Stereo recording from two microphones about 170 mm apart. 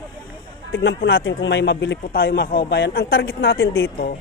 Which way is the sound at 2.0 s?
60° left (ahead or behind).